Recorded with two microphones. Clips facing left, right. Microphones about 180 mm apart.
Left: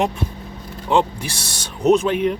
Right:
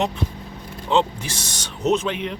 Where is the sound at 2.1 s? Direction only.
45° left (ahead or behind).